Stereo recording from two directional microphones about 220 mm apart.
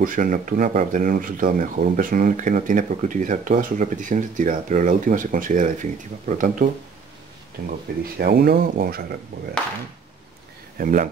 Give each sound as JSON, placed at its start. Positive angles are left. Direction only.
{"t": 0.0, "sound": "speech", "side_deg": -40}
{"t": 10.8, "sound": "speech", "side_deg": -40}